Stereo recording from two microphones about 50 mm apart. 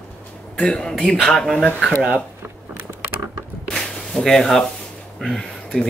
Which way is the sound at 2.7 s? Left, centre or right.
Right.